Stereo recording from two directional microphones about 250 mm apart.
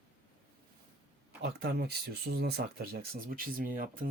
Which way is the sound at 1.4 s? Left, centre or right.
Right.